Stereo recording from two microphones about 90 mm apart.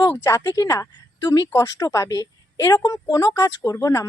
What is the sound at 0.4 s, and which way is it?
A woman's voice, 40° left (ahead or behind).